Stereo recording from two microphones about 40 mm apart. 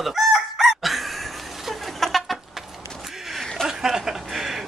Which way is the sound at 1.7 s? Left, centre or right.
Centre.